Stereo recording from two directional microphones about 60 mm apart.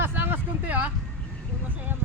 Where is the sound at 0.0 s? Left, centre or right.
Right.